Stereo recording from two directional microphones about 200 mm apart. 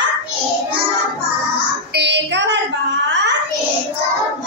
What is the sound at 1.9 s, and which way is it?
Child singing, 60° right (ahead or behind).